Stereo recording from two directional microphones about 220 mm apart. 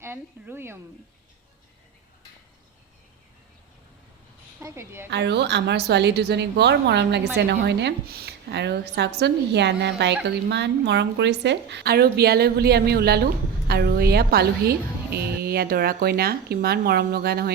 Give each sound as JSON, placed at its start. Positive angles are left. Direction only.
{"t": 0.0, "sound": "a woman's voice", "side_deg": -10}
{"t": 4.6, "sound": "a woman's voice", "side_deg": -10}
{"t": 5.1, "sound": "a woman's voice", "side_deg": -50}